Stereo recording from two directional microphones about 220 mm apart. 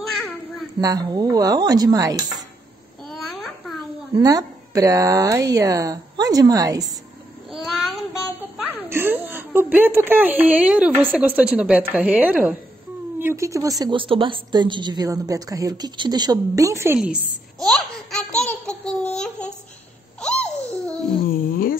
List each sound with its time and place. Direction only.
0.0 s a sound: centre (ahead or behind)
0.7 s a woman's voice: 15° right (ahead or behind)
3.1 s babbling: centre (ahead or behind)
4.2 s a woman's voice: 15° right (ahead or behind)
7.5 s child singing: centre (ahead or behind)
8.8 s a woman's voice: 10° right (ahead or behind)
19.1 s babbling: 5° left (ahead or behind)
21.2 s a sound: 40° left (ahead or behind)